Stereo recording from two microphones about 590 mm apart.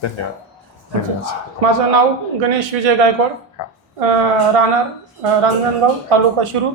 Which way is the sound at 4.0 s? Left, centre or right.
Right.